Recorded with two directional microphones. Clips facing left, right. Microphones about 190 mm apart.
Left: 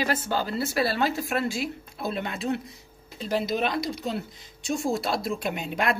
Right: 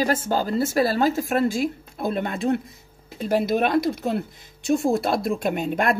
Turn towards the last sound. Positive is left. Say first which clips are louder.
# right 5 dB
turn(degrees=-50)  # may be behind; listen again after turning